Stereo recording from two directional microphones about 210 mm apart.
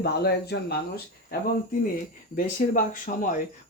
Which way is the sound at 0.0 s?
50° left (ahead or behind).